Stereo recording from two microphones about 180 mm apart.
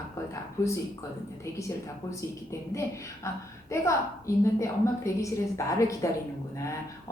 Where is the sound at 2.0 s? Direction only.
15° left (ahead or behind).